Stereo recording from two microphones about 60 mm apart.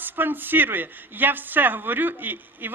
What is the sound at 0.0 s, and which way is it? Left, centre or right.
A woman's voice, right.